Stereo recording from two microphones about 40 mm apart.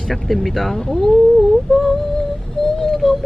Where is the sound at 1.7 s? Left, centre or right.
Centre.